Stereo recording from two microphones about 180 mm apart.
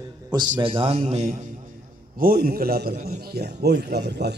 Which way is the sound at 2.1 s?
55° right (ahead or behind).